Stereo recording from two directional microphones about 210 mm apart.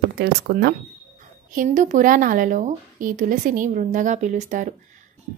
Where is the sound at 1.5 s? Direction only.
40° right (ahead or behind).